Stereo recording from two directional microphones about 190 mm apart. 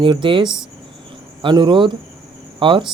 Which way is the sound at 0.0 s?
25° right (ahead or behind).